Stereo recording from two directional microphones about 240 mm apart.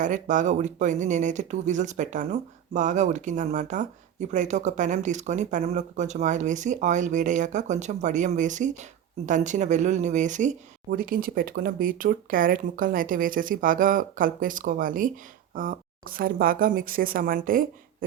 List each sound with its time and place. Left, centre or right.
0.0 s speech: right